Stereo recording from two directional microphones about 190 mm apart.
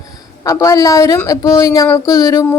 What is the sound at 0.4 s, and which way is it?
A woman's voice, 15° left (ahead or behind).